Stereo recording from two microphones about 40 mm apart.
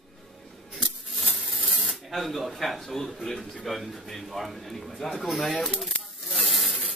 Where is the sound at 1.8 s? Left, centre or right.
Centre.